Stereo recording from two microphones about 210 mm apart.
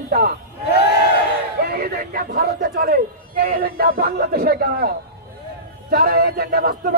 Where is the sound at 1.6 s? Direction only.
45° right (ahead or behind).